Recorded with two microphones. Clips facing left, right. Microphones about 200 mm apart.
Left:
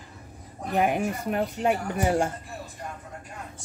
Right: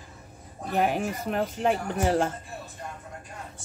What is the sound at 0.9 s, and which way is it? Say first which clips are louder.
Speech: left 2 dB; 10° left (ahead or behind).